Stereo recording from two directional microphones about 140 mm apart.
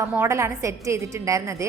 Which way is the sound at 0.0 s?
15° right (ahead or behind).